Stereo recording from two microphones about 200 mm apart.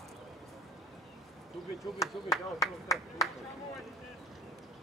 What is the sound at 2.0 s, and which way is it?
Speech, 15° left (ahead or behind).